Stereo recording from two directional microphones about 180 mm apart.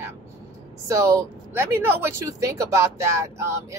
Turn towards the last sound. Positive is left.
turn(degrees=-15)  # may be behind; listen again after turning